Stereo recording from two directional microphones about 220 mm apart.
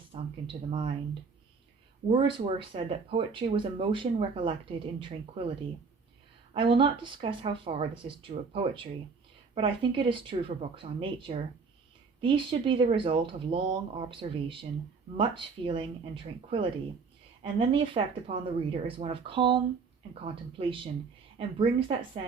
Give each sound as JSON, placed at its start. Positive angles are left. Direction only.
{"t": 0.1, "sound": "speech", "side_deg": -25}
{"t": 2.0, "sound": "speech", "side_deg": -25}
{"t": 6.5, "sound": "speech", "side_deg": -25}